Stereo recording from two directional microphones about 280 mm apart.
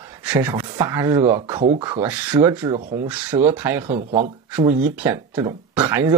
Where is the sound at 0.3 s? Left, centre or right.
Centre.